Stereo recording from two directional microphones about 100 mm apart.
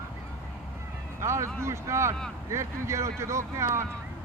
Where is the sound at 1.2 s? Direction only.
30° right (ahead or behind).